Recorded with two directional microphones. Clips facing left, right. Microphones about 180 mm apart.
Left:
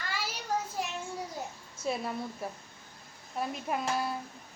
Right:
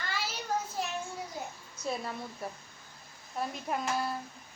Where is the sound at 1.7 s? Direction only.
25° left (ahead or behind).